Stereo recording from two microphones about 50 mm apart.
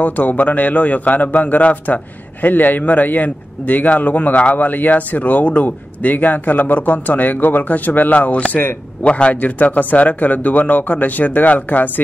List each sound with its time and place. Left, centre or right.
0.0 s a man's voice: left